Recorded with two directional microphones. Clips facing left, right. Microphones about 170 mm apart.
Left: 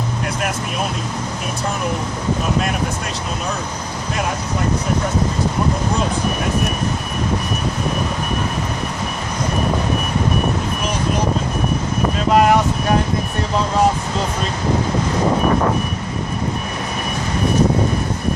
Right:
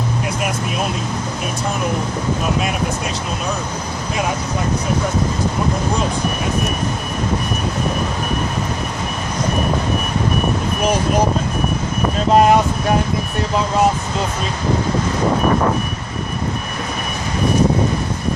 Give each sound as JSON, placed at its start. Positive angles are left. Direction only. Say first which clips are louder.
{"t": 12.3, "sound": "wind noise", "louder": "right 2 dB", "side_deg": -25}